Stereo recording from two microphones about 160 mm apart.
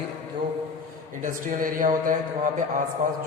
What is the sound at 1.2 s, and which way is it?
Speech, 60° right (ahead or behind).